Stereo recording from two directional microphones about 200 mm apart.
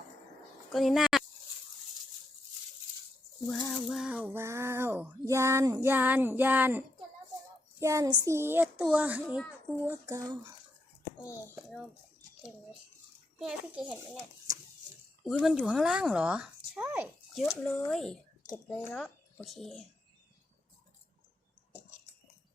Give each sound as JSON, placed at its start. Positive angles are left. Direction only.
{"t": 0.7, "sound": "speech", "side_deg": 0}
{"t": 3.7, "sound": "a child's voice", "side_deg": 0}
{"t": 4.3, "sound": "female singing", "side_deg": -15}
{"t": 13.4, "sound": "a child's voice", "side_deg": -5}
{"t": 14.5, "sound": "a sound", "side_deg": -15}
{"t": 15.2, "sound": "speech", "side_deg": 0}
{"t": 17.4, "sound": "a child's voice", "side_deg": 5}